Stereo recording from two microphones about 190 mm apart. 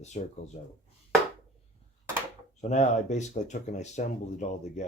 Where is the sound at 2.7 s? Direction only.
40° left (ahead or behind).